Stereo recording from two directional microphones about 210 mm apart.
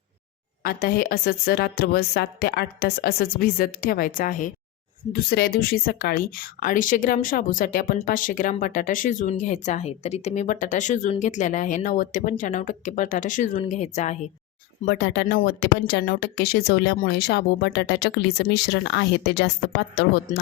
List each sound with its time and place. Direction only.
0.6 s a woman's voice: 45° left (ahead or behind)
14.8 s a woman's voice: 50° left (ahead or behind)